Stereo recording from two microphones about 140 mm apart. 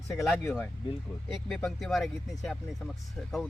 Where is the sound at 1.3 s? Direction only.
Centre (ahead or behind).